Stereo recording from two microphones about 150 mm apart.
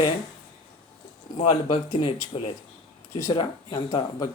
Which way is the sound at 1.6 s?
35° left (ahead or behind).